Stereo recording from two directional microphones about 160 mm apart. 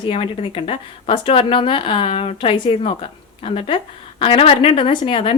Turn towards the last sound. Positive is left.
turn(degrees=35)  # may be behind; listen again after turning